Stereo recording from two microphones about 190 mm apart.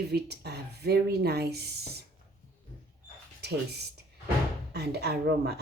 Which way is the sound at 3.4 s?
60° right (ahead or behind).